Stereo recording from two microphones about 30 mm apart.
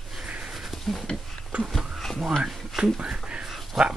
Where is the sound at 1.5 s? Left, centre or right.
Right.